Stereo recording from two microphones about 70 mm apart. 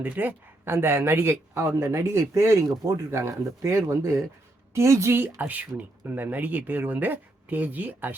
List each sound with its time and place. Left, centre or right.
0.0 s speech: right